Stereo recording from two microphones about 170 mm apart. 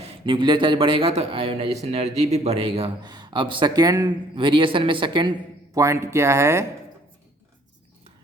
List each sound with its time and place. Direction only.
0.0 s a man's voice: 30° right (ahead or behind)
5.7 s speech: 15° right (ahead or behind)